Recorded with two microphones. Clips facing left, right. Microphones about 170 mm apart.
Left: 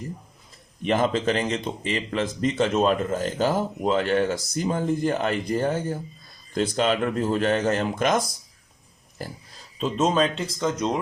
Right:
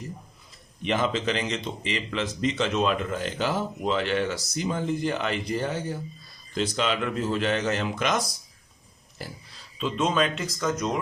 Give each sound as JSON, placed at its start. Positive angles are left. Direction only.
{"t": 0.9, "sound": "speech", "side_deg": 50}